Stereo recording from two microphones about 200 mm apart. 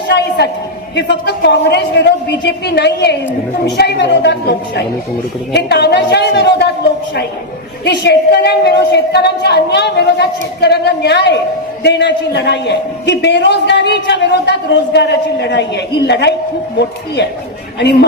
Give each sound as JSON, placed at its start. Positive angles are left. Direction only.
{"t": 0.1, "sound": "a sound", "side_deg": 55}
{"t": 0.9, "sound": "a man's voice", "side_deg": 55}
{"t": 7.9, "sound": "a man's voice", "side_deg": 55}